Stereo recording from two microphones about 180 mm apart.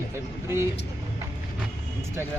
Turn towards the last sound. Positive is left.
turn(degrees=-15)  # may be behind; listen again after turning